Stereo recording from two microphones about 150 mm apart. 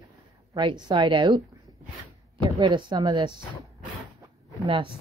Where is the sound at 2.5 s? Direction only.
30° right (ahead or behind).